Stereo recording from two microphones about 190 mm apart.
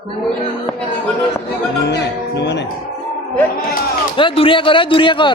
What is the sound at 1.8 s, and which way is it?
Speech, 65° left (ahead or behind).